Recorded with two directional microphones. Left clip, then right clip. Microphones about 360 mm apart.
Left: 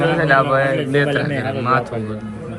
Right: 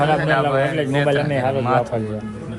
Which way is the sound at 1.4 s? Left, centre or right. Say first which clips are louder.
Even; centre.